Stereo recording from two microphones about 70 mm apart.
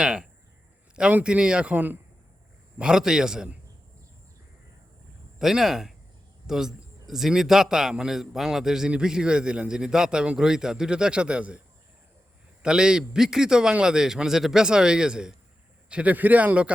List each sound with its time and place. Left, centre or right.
0.0 s a sound: centre
1.2 s a man's voice: centre
2.7 s a man's voice: centre
5.4 s a man's voice: centre
12.6 s a man's voice: centre